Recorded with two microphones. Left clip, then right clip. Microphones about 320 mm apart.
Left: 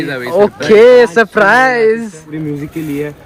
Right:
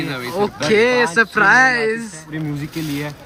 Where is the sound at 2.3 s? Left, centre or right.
Centre.